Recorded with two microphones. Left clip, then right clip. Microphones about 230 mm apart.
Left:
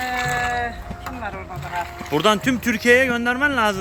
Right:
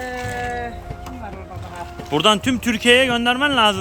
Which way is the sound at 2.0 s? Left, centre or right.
Centre.